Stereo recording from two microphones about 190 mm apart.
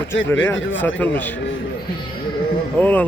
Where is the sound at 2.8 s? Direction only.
10° left (ahead or behind).